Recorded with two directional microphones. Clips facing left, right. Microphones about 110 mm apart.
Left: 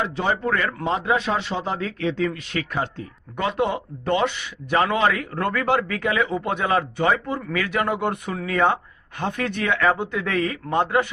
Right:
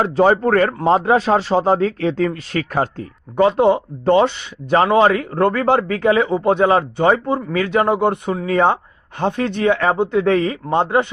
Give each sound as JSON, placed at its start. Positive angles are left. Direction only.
{"t": 0.0, "sound": "a man's voice", "side_deg": -40}
{"t": 3.3, "sound": "a man's voice", "side_deg": -30}